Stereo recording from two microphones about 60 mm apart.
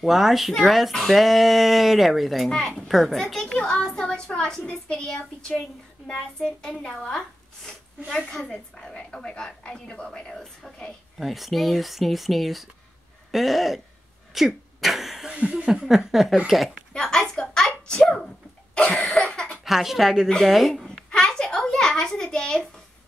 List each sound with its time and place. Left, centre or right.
0.0 s a child's voice: centre
8.4 s a child's voice: centre
14.3 s a sound: centre
15.3 s speech: centre
16.9 s a child's voice: centre
19.0 s cough: centre
19.6 s speech: centre
21.1 s a sound: centre